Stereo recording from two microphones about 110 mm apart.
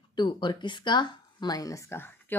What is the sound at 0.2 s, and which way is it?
Speech, 45° left (ahead or behind).